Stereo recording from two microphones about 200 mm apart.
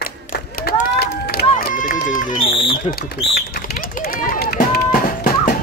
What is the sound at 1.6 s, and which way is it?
Run, 45° left (ahead or behind).